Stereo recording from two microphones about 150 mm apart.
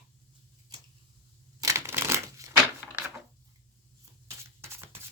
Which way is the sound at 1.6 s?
15° right (ahead or behind).